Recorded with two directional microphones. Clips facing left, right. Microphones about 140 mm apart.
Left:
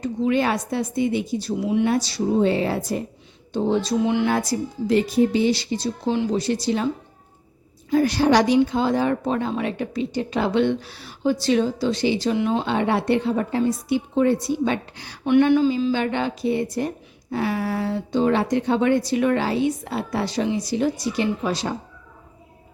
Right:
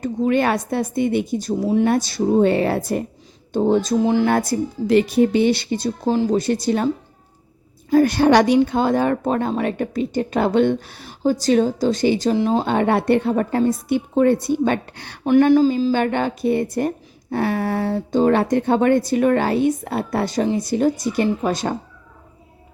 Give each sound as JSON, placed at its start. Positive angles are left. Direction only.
{"t": 0.0, "sound": "speech", "side_deg": -50}
{"t": 3.5, "sound": "speech", "side_deg": -45}
{"t": 4.3, "sound": "speech", "side_deg": -55}
{"t": 7.9, "sound": "speech", "side_deg": -50}
{"t": 12.6, "sound": "speech", "side_deg": -50}
{"t": 15.2, "sound": "speech", "side_deg": -40}
{"t": 17.8, "sound": "speech", "side_deg": -40}